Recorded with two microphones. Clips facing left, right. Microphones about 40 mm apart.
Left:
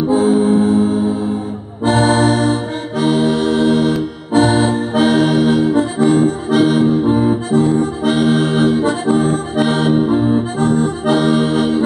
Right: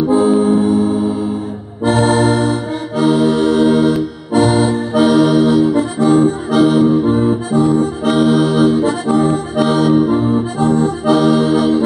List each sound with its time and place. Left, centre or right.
0.1 s music: left
4.3 s accordion: left
10.3 s accordion: left